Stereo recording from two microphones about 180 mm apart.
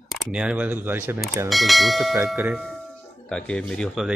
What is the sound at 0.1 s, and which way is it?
Speech, 5° right (ahead or behind).